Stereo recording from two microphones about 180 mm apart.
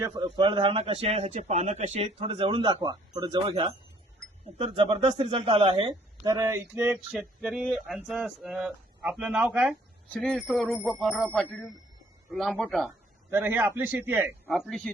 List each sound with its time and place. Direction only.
0.3 s speech: 25° right (ahead or behind); by 12.9 s centre (ahead or behind)
13.3 s speech: 10° right (ahead or behind)
14.4 s speech: centre (ahead or behind)